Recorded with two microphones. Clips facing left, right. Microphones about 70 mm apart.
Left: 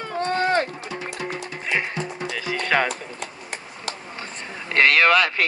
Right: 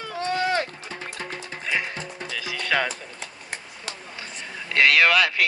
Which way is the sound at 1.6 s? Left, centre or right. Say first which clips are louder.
Left 2 dB; left.